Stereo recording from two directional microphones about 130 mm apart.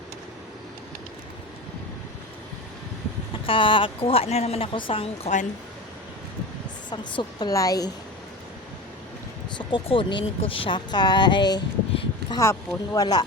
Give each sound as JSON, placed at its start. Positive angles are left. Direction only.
{"t": 3.4, "sound": "speech", "side_deg": 40}
{"t": 6.9, "sound": "speech", "side_deg": 35}
{"t": 9.6, "sound": "speech", "side_deg": 40}